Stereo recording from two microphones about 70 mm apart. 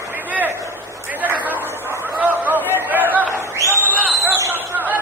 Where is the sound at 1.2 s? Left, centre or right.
Right.